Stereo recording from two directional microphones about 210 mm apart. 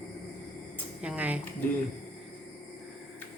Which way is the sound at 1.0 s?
5° right (ahead or behind).